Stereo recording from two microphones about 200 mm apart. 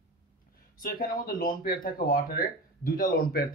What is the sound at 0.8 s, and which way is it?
Speech, 45° left (ahead or behind).